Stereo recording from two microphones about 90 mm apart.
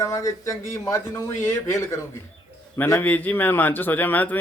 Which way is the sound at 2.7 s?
25° left (ahead or behind).